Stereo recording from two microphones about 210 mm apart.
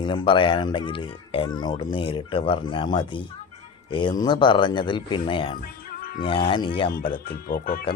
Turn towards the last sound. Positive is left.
turn(degrees=45)  # may be behind; listen again after turning